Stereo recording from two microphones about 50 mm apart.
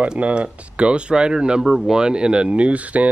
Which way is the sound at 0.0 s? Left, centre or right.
Right.